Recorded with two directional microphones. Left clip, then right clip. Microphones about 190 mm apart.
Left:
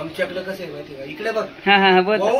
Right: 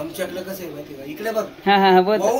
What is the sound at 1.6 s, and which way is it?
Speech, 20° right (ahead or behind).